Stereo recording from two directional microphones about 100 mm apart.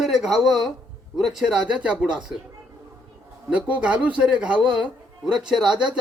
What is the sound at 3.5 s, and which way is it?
A man's voice, 15° right (ahead or behind).